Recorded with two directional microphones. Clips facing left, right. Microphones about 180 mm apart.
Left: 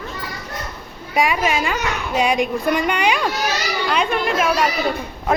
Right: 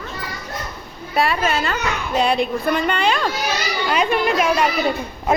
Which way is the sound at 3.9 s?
5° right (ahead or behind).